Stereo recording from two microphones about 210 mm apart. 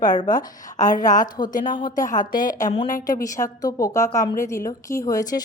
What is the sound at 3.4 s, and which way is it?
Speech, 15° left (ahead or behind).